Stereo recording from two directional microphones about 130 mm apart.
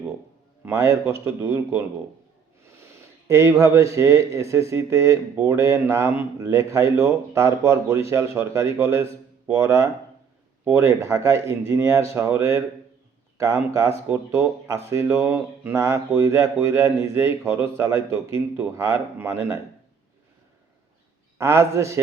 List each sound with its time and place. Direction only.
0.6 s a man's voice: 20° right (ahead or behind)
14.1 s a man's voice: 15° right (ahead or behind)
21.3 s a man's voice: 20° right (ahead or behind)